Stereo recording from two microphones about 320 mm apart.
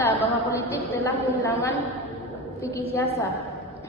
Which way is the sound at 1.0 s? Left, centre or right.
Centre.